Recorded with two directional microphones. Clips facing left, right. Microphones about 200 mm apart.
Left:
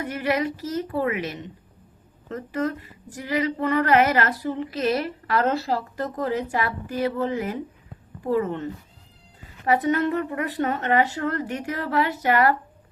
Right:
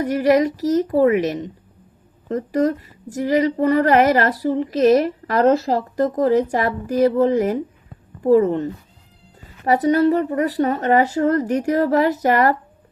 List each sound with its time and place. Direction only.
0.0 s speech: 40° right (ahead or behind)